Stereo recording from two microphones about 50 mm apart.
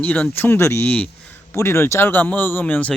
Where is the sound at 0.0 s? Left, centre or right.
Left.